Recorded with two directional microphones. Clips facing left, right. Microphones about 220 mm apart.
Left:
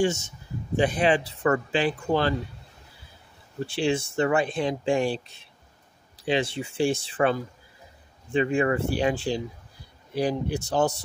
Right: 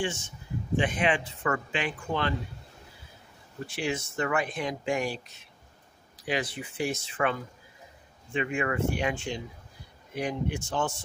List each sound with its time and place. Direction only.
0.0 s a man's voice: 40° left (ahead or behind)
3.6 s speech: 30° left (ahead or behind)